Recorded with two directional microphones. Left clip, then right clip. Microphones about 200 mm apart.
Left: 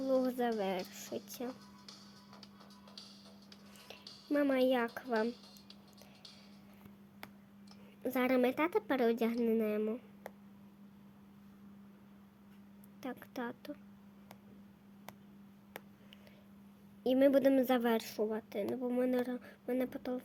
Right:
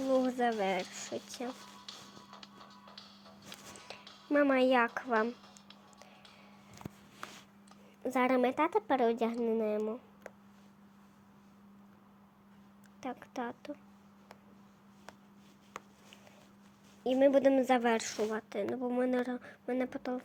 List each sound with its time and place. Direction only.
0.1 s speech: 5° right (ahead or behind)
2.6 s music: 30° left (ahead or behind)
3.8 s speech: centre (ahead or behind)
8.0 s speech: 5° left (ahead or behind)
13.0 s speech: 10° left (ahead or behind)
17.0 s a woman's voice: 10° left (ahead or behind)